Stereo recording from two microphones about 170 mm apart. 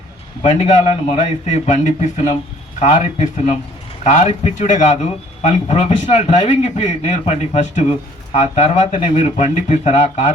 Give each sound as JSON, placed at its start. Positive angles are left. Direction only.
{"t": 0.4, "sound": "a man's voice", "side_deg": 40}